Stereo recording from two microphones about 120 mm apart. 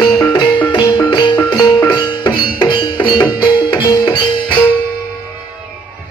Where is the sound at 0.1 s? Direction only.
40° left (ahead or behind).